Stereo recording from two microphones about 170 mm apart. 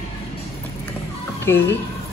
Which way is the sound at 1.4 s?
15° left (ahead or behind).